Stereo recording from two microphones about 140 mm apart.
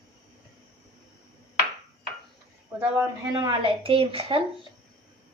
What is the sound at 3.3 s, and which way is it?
A woman's voice, 35° right (ahead or behind).